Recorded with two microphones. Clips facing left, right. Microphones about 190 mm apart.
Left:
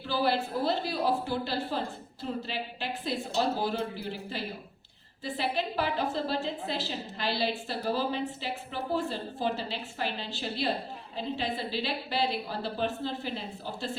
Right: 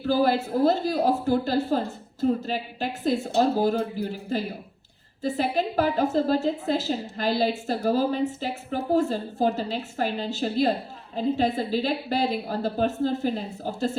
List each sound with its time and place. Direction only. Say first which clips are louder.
0.0 s a woman's voice: right 6 dB; 45° right (ahead or behind)